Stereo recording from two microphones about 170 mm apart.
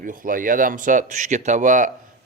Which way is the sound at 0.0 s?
55° right (ahead or behind).